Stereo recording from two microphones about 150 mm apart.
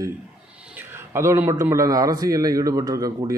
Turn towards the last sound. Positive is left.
turn(degrees=-25)  # may be behind; listen again after turning